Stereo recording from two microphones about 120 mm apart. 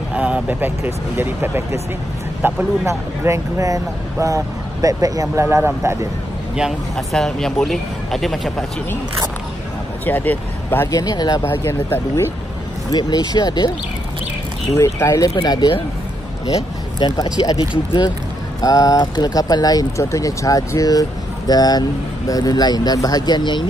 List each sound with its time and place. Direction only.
0.1 s speech: 10° right (ahead or behind)
6.5 s speech: 5° right (ahead or behind)
10.0 s speech: 15° left (ahead or behind)
10.9 s speech: 30° left (ahead or behind)
11.4 s speech: 20° left (ahead or behind)
12.9 s speech: 35° left (ahead or behind)
14.7 s speech: 25° left (ahead or behind)
17.0 s speech: 35° left (ahead or behind)